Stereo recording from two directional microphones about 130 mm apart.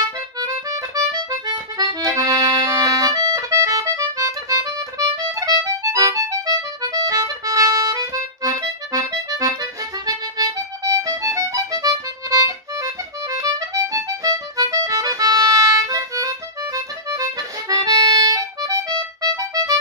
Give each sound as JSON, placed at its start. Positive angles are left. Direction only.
{"t": 0.4, "sound": "accordion", "side_deg": -25}